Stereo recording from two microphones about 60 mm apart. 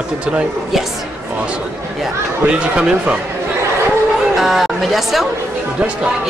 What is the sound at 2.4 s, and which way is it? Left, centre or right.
Speech, centre.